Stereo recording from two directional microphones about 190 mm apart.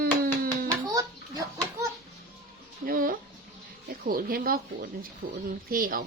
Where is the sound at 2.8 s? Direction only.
50° right (ahead or behind).